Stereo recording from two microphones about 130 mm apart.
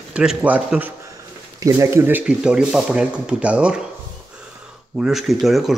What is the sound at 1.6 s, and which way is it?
Speech, 25° right (ahead or behind).